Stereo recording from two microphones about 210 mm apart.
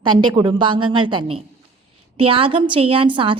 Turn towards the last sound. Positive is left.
turn(degrees=-25)  # may be behind; listen again after turning